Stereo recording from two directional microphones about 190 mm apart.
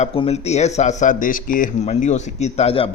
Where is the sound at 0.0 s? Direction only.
30° left (ahead or behind).